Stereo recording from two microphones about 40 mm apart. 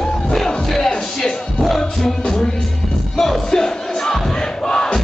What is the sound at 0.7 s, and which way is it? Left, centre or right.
Music, centre.